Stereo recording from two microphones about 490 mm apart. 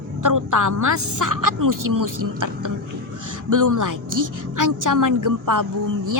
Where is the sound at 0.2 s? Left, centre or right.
Right.